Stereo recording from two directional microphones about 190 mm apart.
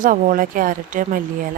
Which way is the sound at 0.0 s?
45° right (ahead or behind).